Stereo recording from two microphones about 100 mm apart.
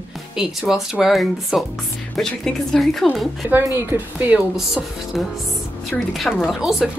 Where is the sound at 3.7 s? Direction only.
20° right (ahead or behind).